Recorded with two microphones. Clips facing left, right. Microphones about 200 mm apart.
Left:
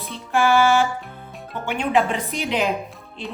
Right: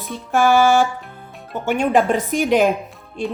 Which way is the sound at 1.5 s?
45° right (ahead or behind).